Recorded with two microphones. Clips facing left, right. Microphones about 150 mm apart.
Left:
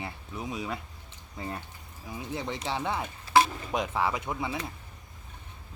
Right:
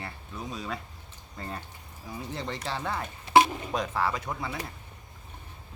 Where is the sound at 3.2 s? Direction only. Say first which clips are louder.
Right 3 dB; 20° right (ahead or behind).